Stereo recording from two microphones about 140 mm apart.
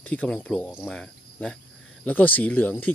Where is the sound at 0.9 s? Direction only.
5° left (ahead or behind).